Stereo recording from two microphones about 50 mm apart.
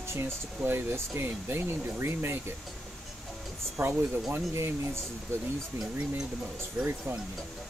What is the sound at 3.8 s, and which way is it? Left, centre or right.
Speech, right.